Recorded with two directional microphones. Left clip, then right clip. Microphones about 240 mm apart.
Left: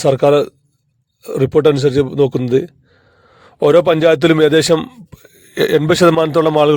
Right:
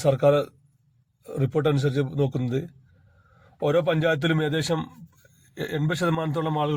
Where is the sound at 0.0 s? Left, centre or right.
Left.